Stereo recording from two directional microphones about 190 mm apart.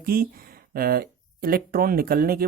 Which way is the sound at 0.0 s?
50° right (ahead or behind).